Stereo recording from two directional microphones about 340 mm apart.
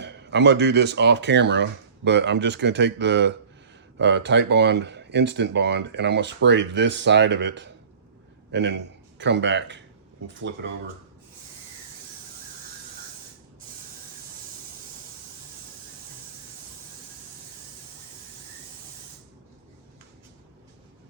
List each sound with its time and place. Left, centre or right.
0.0 s a man's voice: right